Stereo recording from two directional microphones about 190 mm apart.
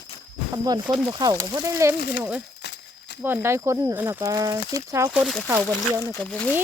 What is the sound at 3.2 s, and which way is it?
Speech, 10° right (ahead or behind).